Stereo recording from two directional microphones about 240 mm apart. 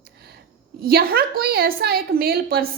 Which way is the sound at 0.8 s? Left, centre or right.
Right.